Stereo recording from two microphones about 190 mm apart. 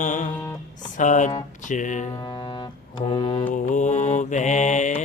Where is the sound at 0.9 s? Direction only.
40° left (ahead or behind).